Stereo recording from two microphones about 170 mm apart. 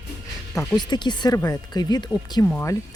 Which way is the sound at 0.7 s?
25° left (ahead or behind).